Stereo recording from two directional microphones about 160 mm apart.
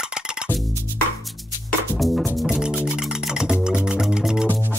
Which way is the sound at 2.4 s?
5° right (ahead or behind).